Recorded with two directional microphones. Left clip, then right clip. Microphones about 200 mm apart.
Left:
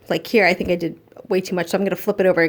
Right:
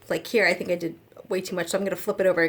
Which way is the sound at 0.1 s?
40° left (ahead or behind).